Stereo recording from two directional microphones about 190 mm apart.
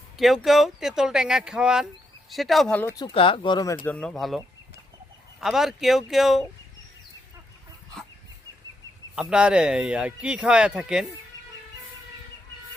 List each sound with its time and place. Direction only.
0.4 s speech: centre (ahead or behind)
2.9 s speech: 25° left (ahead or behind)
3.8 s speech: 5° left (ahead or behind)
9.1 s speech: 5° right (ahead or behind)